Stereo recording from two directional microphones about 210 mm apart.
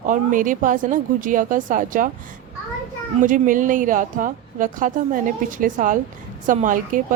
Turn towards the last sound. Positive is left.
turn(degrees=-40)  # may be behind; listen again after turning